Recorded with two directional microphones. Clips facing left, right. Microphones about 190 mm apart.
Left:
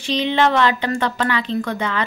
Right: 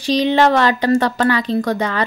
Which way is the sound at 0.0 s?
40° right (ahead or behind).